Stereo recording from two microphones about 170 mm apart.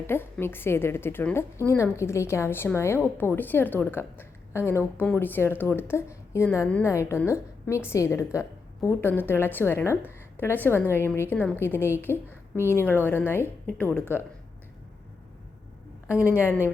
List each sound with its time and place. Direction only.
0.1 s a woman's voice: 15° left (ahead or behind)
16.0 s a woman's voice: 10° right (ahead or behind)
16.3 s a woman's voice: 15° left (ahead or behind)